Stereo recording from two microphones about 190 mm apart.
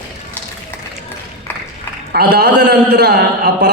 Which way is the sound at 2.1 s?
60° right (ahead or behind).